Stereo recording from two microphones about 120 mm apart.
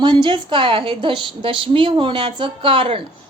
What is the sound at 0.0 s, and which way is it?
Speech, 40° right (ahead or behind).